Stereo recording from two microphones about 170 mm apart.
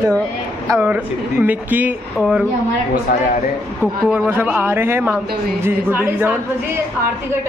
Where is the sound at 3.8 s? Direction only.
10° right (ahead or behind).